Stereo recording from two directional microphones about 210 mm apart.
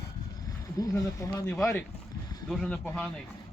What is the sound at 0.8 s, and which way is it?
Speech, 15° left (ahead or behind).